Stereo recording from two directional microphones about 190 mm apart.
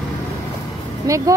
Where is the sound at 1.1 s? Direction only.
20° right (ahead or behind).